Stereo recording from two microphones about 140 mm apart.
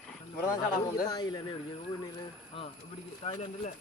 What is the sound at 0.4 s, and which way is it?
Speech, 25° left (ahead or behind).